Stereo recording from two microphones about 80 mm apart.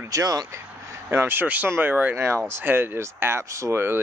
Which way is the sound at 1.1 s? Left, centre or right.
Right.